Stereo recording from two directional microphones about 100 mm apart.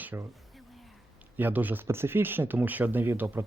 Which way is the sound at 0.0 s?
20° right (ahead or behind).